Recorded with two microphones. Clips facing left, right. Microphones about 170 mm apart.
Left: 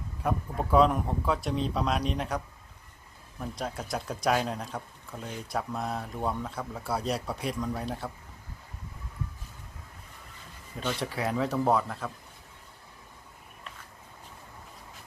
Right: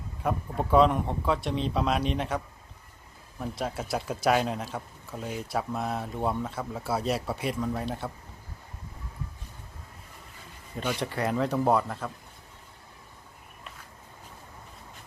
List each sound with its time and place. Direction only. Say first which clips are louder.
0.2 s speech: right 1 dB; centre (ahead or behind)
3.4 s speech: right 3 dB; 5° right (ahead or behind)
10.8 s speech: right 2 dB; centre (ahead or behind)